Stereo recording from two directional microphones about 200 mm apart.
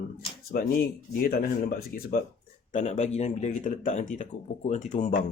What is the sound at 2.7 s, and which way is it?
Speech, 40° left (ahead or behind).